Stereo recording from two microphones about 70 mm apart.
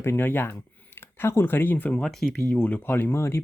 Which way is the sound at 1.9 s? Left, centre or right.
Centre.